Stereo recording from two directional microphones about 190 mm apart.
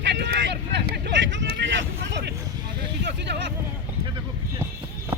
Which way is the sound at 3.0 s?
65° right (ahead or behind).